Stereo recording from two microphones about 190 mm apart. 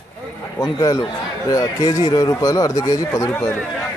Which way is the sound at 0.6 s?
20° left (ahead or behind).